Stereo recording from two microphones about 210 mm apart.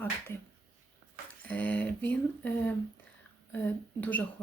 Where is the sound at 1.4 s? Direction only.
5° left (ahead or behind).